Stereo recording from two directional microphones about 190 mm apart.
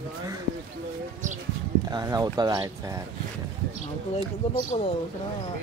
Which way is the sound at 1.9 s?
20° right (ahead or behind).